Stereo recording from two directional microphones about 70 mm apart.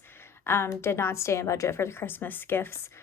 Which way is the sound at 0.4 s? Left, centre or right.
Left.